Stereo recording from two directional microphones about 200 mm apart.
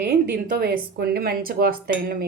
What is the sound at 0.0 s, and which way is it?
A woman's voice, 50° right (ahead or behind).